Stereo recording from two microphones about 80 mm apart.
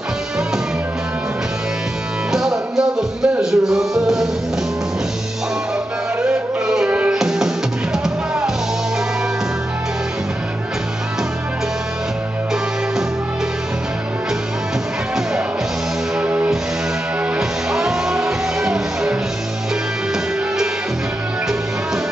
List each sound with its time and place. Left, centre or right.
2.3 s music: centre
6.2 s music: centre
16.2 s music: centre